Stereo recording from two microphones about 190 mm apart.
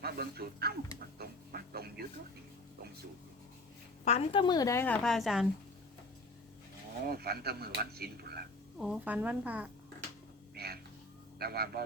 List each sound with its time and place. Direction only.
0.0 s music: 55° right (ahead or behind)
4.0 s a woman's voice: 30° left (ahead or behind); by 5.5 s centre (ahead or behind)
7.1 s speech: 55° right (ahead or behind)
8.8 s a woman's voice: 5° right (ahead or behind)
10.5 s a sound: 55° right (ahead or behind)
11.3 s a man's voice: 55° right (ahead or behind)